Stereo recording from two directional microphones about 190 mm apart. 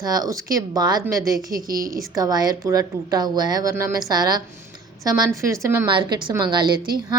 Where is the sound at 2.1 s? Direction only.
20° right (ahead or behind).